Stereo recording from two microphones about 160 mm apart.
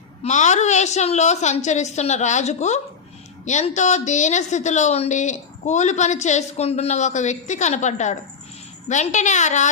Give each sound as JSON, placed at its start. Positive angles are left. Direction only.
{"t": 0.2, "sound": "a woman's voice", "side_deg": 45}